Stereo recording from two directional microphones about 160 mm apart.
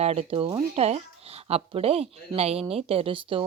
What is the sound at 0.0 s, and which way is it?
Speech, 40° right (ahead or behind).